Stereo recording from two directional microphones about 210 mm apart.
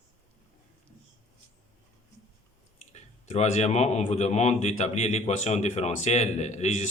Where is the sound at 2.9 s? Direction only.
35° left (ahead or behind).